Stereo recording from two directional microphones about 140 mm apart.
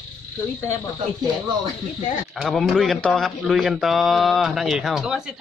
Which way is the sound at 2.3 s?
Centre (ahead or behind).